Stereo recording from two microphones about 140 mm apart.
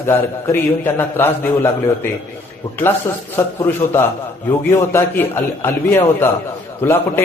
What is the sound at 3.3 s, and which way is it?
A man's voice, 20° left (ahead or behind).